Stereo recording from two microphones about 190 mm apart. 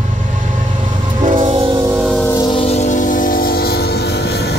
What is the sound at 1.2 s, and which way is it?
Train, 40° right (ahead or behind).